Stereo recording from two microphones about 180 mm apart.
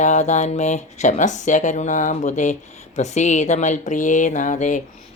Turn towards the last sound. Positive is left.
turn(degrees=45)  # may be behind; listen again after turning